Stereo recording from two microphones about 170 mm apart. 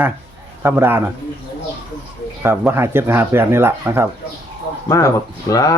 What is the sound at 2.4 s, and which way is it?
Speech, 15° right (ahead or behind).